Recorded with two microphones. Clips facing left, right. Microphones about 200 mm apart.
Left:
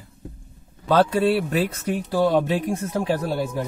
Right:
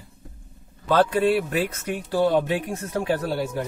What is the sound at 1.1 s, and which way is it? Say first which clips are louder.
Speech: left 1 dB; 35° left (ahead or behind).